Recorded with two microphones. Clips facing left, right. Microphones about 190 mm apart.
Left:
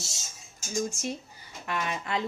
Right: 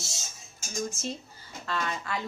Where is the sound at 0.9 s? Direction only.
15° left (ahead or behind).